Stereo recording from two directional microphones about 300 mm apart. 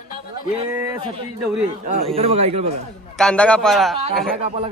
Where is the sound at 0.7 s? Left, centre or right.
Centre.